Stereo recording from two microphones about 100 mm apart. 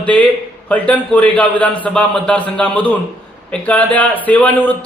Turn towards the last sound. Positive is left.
turn(degrees=15)  # may be behind; listen again after turning